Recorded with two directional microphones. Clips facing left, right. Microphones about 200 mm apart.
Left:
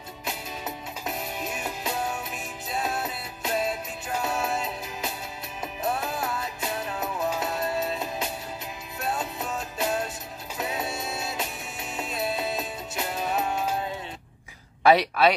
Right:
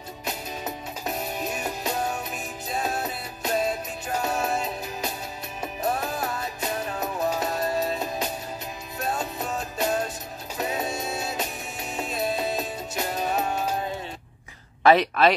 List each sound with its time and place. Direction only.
0.2 s music: 40° right (ahead or behind)
14.8 s speech: 5° left (ahead or behind)